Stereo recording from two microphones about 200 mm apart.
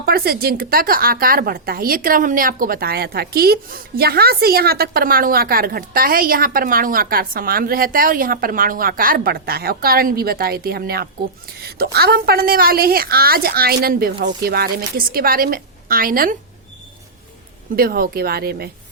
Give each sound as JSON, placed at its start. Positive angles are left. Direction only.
{"t": 0.0, "sound": "speech", "side_deg": -50}
{"t": 17.7, "sound": "speech", "side_deg": -50}